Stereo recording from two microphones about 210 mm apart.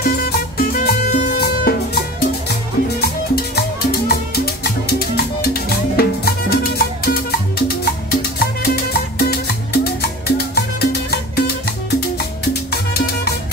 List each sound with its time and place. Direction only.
0.2 s salsa music: 45° left (ahead or behind)
3.0 s music: 50° left (ahead or behind)
12.9 s music: 45° left (ahead or behind)